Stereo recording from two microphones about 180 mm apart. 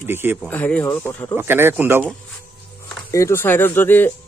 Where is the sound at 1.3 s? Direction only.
15° right (ahead or behind).